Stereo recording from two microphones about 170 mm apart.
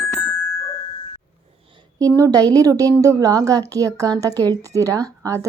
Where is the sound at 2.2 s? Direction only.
20° right (ahead or behind).